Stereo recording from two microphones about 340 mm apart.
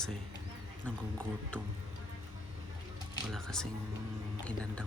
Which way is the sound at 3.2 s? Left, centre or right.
Centre.